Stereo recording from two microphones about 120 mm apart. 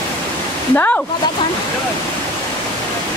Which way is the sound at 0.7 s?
10° left (ahead or behind).